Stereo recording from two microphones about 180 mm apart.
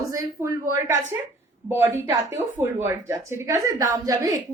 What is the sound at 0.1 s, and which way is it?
Speech, 15° right (ahead or behind).